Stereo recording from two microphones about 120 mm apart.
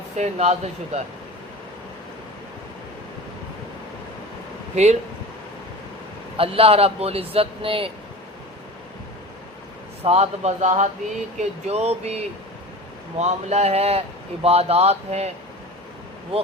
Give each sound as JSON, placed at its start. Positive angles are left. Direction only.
{"t": 0.2, "sound": "speech", "side_deg": -65}
{"t": 4.7, "sound": "speech", "side_deg": -70}
{"t": 6.3, "sound": "speech", "side_deg": -50}
{"t": 10.0, "sound": "speech", "side_deg": -60}